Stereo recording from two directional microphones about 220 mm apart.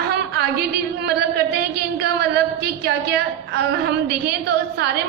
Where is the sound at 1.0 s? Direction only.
45° right (ahead or behind).